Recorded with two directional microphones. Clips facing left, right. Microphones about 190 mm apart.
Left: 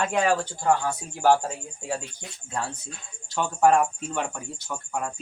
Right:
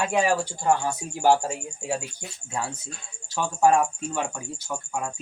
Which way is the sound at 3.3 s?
10° right (ahead or behind).